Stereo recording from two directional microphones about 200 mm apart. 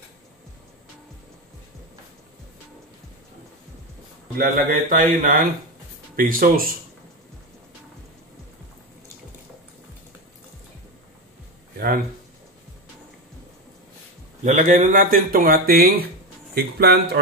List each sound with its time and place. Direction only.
4.4 s speech: 45° right (ahead or behind)
14.4 s speech: 40° right (ahead or behind)